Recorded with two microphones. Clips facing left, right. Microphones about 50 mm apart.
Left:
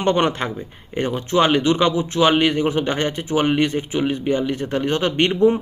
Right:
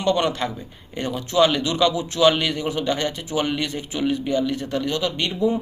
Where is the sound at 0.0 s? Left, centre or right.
Left.